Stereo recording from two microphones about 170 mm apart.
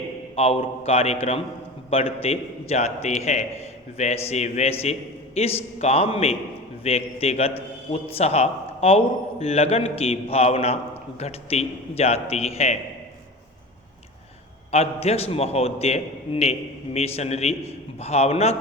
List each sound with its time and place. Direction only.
0.3 s a man's voice: 35° left (ahead or behind)
14.7 s a man's voice: 35° left (ahead or behind)